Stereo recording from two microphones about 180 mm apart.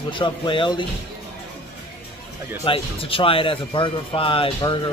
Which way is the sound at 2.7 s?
30° left (ahead or behind).